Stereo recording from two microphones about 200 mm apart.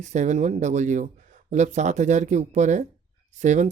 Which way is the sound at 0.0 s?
35° right (ahead or behind).